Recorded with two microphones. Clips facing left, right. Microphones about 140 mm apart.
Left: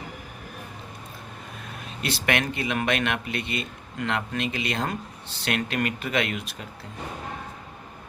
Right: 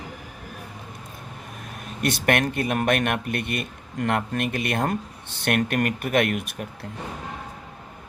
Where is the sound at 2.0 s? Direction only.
50° right (ahead or behind).